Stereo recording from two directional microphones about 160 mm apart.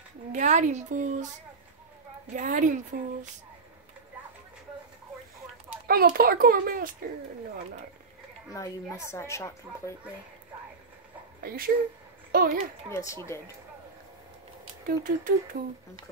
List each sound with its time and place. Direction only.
0.3 s speech: 50° right (ahead or behind)
2.3 s speech: 55° right (ahead or behind)
5.9 s a child's voice: 65° right (ahead or behind)
8.5 s a woman's voice: 20° left (ahead or behind)
11.4 s a child's voice: 65° right (ahead or behind)
12.9 s speech: 15° left (ahead or behind)
14.9 s a child's voice: 60° right (ahead or behind)